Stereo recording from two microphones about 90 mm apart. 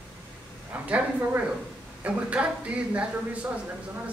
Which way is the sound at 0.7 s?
20° right (ahead or behind).